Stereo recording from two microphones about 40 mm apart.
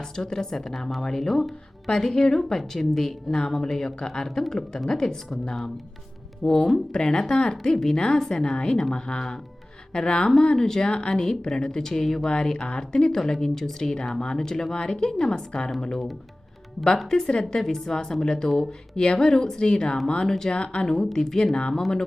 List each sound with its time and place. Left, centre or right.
0.0 s a woman's voice: centre
17.1 s a woman's voice: centre
20.2 s a woman's voice: centre
20.5 s a woman's voice: left